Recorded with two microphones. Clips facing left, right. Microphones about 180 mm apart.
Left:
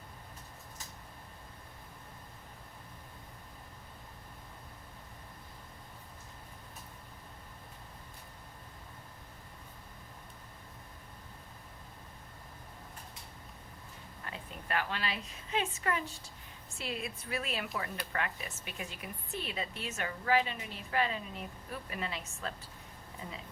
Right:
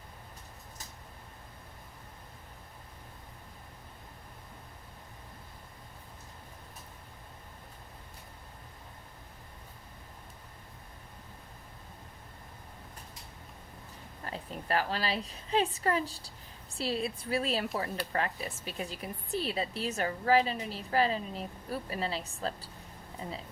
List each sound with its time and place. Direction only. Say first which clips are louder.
14.3 s a woman's voice: right 5 dB; 35° right (ahead or behind)